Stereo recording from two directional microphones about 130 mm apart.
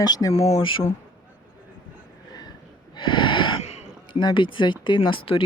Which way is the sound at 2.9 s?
35° left (ahead or behind).